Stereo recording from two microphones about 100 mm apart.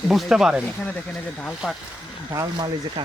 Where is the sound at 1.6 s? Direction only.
10° right (ahead or behind).